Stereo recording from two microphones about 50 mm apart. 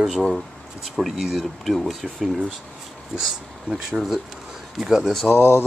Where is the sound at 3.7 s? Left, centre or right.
Right.